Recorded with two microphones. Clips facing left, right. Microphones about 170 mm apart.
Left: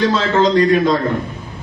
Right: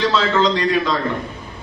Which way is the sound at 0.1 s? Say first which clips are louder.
Left 3 dB; 45° left (ahead or behind).